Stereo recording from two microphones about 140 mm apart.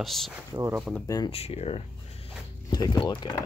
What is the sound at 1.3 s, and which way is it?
Speech, 45° left (ahead or behind).